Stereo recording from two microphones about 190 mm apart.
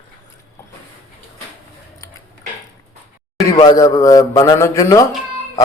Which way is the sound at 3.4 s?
20° left (ahead or behind).